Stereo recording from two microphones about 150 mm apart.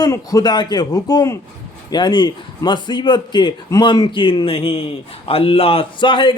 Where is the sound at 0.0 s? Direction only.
25° left (ahead or behind).